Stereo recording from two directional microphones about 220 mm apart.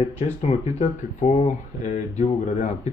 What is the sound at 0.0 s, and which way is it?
Speech, 30° left (ahead or behind).